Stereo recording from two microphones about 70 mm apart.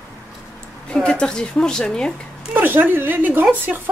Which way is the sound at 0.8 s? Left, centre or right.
Centre.